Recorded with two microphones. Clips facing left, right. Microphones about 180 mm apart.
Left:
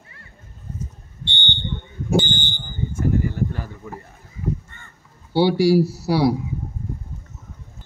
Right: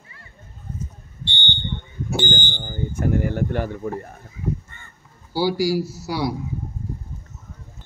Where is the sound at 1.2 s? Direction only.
60° left (ahead or behind).